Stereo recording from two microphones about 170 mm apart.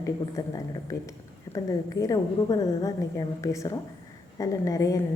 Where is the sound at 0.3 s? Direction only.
20° left (ahead or behind).